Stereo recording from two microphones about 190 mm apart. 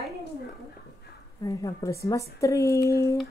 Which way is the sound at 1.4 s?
20° left (ahead or behind).